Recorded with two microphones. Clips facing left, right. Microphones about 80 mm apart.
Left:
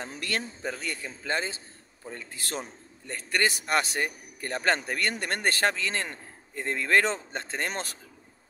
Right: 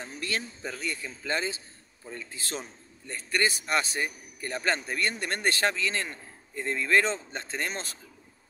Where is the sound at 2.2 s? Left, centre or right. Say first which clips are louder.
Left 2 dB; left.